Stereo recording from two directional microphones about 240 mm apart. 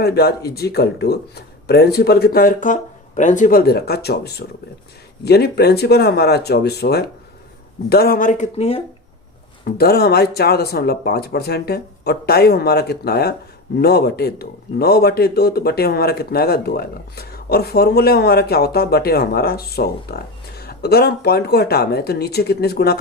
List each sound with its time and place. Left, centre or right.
0.0 s a man's voice: left
9.6 s a man's voice: left